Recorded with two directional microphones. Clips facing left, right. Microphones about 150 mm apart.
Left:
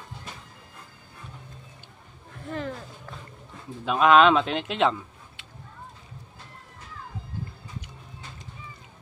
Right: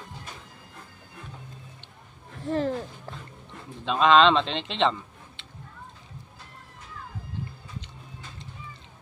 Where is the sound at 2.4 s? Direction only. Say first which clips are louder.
Right 6 dB; 35° right (ahead or behind).